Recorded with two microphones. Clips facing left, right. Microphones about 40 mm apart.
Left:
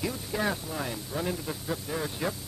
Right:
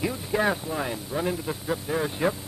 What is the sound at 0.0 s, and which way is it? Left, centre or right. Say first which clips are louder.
Speech: right 5 dB; centre.